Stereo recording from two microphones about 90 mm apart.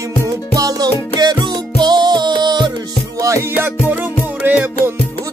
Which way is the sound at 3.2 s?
30° right (ahead or behind).